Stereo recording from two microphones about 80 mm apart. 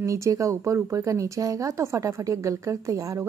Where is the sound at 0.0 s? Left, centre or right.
Right.